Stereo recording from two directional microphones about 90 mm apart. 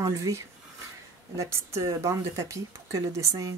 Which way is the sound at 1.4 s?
30° right (ahead or behind).